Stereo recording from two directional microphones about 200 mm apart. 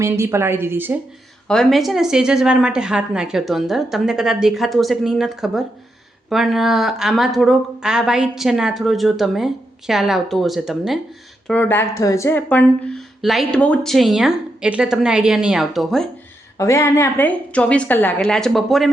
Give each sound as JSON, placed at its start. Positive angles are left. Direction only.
{"t": 0.0, "sound": "a woman's voice", "side_deg": -15}
{"t": 1.5, "sound": "speech", "side_deg": 0}
{"t": 16.6, "sound": "a woman's voice", "side_deg": 15}